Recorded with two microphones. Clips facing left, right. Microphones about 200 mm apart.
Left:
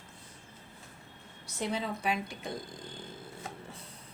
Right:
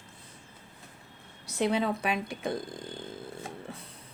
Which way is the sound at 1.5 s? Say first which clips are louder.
Right 7 dB; 65° right (ahead or behind).